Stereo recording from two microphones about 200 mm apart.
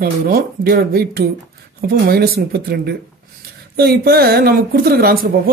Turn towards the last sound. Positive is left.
turn(degrees=-50)  # may be behind; listen again after turning